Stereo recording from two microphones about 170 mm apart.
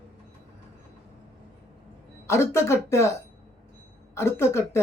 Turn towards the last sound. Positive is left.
turn(degrees=15)  # may be behind; listen again after turning